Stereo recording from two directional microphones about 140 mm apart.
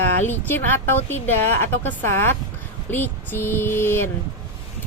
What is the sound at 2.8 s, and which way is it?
Speech, 15° left (ahead or behind).